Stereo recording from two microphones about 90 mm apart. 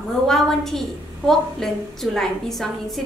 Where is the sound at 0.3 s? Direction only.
5° left (ahead or behind).